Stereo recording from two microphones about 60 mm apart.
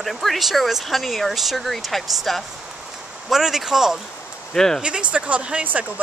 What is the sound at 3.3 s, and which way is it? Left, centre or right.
Speech, centre.